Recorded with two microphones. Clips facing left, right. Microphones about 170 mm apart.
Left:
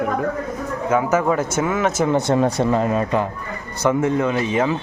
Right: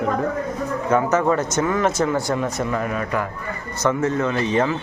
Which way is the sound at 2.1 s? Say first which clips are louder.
Left 5 dB; 25° left (ahead or behind).